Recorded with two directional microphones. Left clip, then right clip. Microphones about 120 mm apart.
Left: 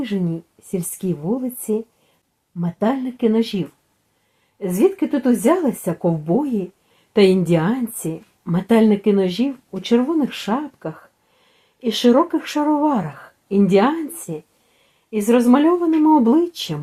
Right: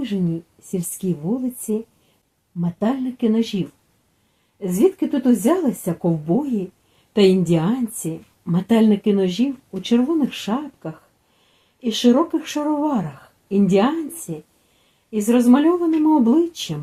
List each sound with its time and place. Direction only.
0.0 s a woman's voice: 25° left (ahead or behind)